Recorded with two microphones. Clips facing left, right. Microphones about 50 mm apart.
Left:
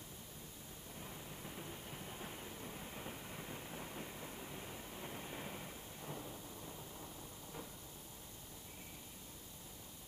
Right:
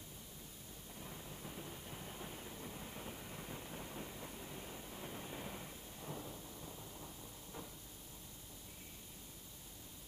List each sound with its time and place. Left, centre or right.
0.9 s train: centre